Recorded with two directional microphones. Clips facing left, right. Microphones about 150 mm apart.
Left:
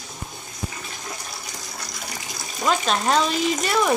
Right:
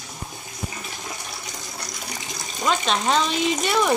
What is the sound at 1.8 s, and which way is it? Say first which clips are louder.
A woman's voice: even; 5° left (ahead or behind).